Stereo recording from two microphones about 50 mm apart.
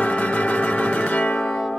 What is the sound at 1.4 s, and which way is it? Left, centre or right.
Music, centre.